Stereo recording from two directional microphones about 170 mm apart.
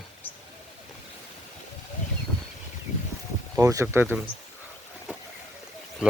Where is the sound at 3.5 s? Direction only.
15° right (ahead or behind).